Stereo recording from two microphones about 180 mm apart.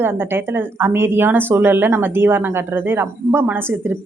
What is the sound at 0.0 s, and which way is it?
A woman's voice, 10° right (ahead or behind).